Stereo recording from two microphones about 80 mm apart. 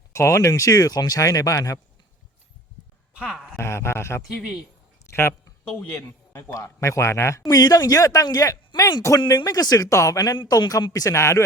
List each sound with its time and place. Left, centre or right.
0.1 s speech: left
3.2 s speech: centre
3.5 s speech: left
5.0 s a sound: left
5.9 s a man's voice: left
6.5 s speech: left
7.4 s speech: left
9.2 s speech: left
11.1 s speech: left